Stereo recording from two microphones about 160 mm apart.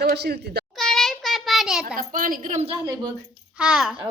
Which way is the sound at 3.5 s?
5° right (ahead or behind).